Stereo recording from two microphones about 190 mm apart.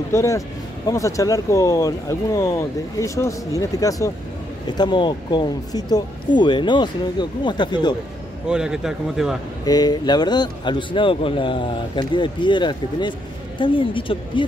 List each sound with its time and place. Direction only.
0.1 s speech: 15° left (ahead or behind)
8.5 s speech: 5° right (ahead or behind)
9.7 s speech: 20° left (ahead or behind)